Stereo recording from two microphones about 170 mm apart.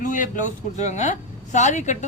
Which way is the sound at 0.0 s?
50° left (ahead or behind).